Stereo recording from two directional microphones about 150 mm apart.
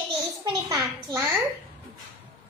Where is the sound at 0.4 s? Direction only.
25° right (ahead or behind).